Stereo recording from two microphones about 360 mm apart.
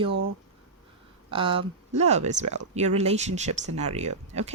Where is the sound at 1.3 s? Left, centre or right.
Centre.